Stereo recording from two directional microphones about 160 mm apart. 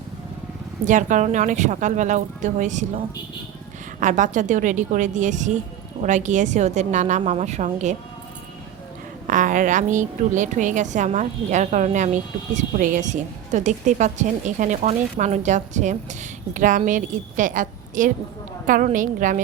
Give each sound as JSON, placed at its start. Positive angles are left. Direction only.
{"t": 0.9, "sound": "a woman's voice", "side_deg": -50}
{"t": 4.0, "sound": "a woman's voice", "side_deg": -50}
{"t": 9.2, "sound": "a woman's voice", "side_deg": -55}